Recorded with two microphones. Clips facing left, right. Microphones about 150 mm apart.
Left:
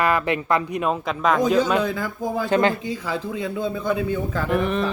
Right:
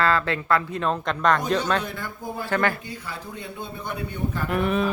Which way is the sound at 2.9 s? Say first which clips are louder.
Left 9 dB; 90° left.